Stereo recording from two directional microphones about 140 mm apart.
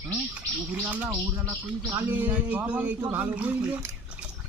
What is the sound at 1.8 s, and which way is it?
Speech, 25° right (ahead or behind).